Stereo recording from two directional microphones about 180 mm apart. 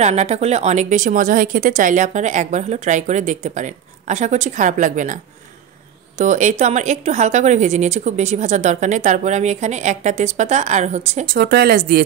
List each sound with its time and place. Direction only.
0.0 s a woman's voice: 40° right (ahead or behind)
11.2 s speech: 55° right (ahead or behind)